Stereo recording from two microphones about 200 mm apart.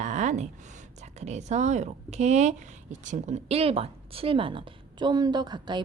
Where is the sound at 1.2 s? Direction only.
35° right (ahead or behind).